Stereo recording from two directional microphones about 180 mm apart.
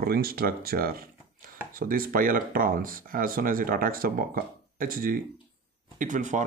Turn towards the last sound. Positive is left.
turn(degrees=-45)  # may be behind; listen again after turning